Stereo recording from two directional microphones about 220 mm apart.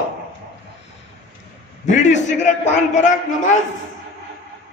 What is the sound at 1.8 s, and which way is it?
A man's voice, 35° left (ahead or behind).